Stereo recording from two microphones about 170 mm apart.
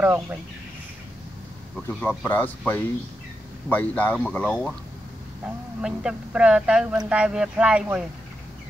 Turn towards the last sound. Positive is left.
turn(degrees=-5)  # may be behind; listen again after turning